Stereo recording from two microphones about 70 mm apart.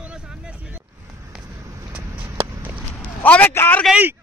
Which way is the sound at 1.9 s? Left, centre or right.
Centre.